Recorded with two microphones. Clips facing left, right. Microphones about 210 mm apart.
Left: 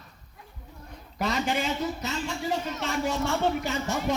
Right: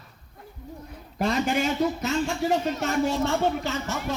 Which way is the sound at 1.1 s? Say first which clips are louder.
Right 4 dB; 45° right (ahead or behind).